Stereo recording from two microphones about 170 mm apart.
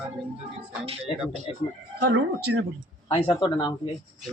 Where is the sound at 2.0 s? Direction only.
75° right (ahead or behind).